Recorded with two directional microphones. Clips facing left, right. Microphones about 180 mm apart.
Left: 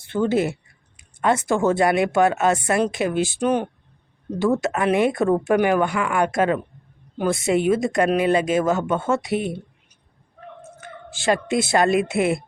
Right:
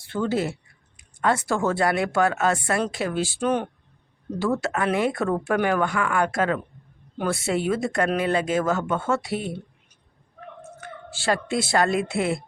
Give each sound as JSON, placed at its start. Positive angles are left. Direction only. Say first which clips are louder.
{"t": 0.0, "sound": "speech", "louder": "left 4 dB", "side_deg": 20}
{"t": 11.1, "sound": "speech", "louder": "left 4 dB", "side_deg": 15}